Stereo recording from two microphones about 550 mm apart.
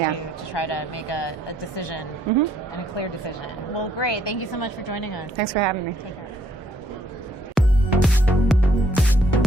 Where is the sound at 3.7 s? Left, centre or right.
Left.